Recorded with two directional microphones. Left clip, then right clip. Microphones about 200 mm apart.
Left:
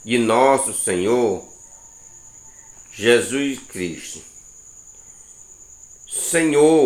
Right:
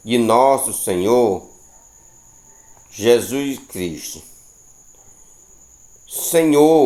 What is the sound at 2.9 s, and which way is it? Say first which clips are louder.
Speech: right 1 dB; 30° right (ahead or behind).